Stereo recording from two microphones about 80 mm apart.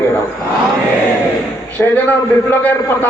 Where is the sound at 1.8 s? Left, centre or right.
Left.